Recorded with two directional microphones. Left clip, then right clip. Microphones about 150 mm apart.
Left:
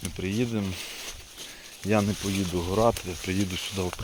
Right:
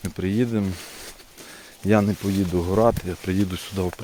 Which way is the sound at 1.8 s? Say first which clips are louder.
Right 5 dB; 80° right.